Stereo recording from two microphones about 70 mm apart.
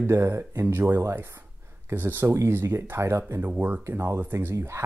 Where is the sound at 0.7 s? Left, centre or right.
Right.